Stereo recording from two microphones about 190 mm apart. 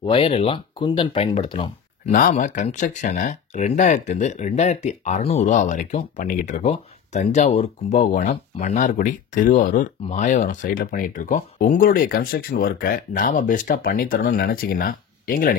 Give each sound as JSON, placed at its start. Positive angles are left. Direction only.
{"t": 0.0, "sound": "speech", "side_deg": 30}
{"t": 2.0, "sound": "speech", "side_deg": 45}